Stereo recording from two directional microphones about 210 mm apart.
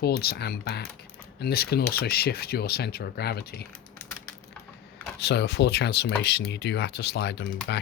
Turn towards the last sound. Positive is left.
turn(degrees=55)  # may be behind; listen again after turning